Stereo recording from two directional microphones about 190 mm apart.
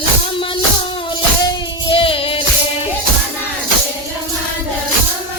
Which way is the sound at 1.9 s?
30° left (ahead or behind).